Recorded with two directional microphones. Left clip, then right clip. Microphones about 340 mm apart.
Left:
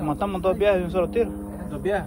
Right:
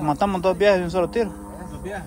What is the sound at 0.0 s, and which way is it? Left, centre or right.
Speech, centre.